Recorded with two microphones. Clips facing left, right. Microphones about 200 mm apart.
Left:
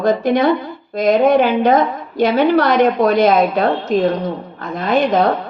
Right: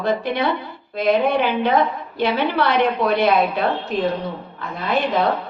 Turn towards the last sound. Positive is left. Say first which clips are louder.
# left 5 dB
turn(degrees=45)  # may be behind; listen again after turning